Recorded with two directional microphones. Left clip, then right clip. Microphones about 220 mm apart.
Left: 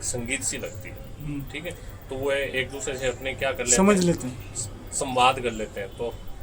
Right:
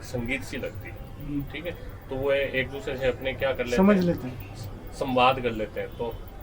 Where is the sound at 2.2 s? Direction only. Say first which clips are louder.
Right 1 dB; 15° left (ahead or behind).